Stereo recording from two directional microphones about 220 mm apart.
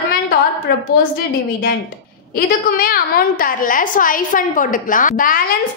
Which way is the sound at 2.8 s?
40° left (ahead or behind).